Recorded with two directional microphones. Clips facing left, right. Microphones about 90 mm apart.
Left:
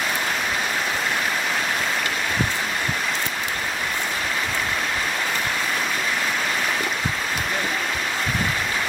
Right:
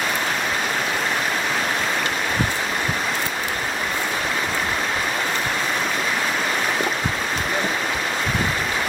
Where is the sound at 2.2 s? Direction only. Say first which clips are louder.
Right 1 dB; 5° right (ahead or behind).